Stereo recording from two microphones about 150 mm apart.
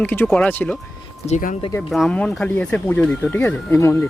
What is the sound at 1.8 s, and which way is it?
Speech, centre (ahead or behind).